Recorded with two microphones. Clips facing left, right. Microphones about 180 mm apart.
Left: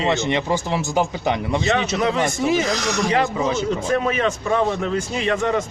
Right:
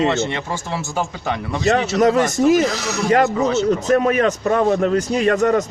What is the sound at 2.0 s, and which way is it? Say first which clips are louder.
Speech: right 6 dB; 45° right (ahead or behind).